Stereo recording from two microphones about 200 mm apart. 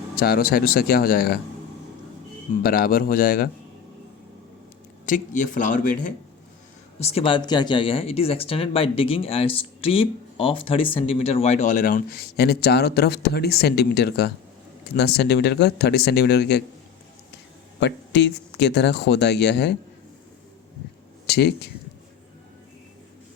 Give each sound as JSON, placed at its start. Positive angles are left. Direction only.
{"t": 0.2, "sound": "speech", "side_deg": 50}
{"t": 2.6, "sound": "speech", "side_deg": 50}
{"t": 5.0, "sound": "speech", "side_deg": 40}
{"t": 7.0, "sound": "speech", "side_deg": 30}
{"t": 17.7, "sound": "speech", "side_deg": 60}
{"t": 21.2, "sound": "a man's voice", "side_deg": 55}